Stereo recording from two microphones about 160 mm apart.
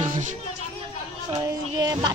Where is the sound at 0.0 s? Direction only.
50° right (ahead or behind).